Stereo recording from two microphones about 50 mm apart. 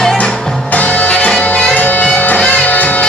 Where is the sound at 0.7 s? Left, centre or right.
Left.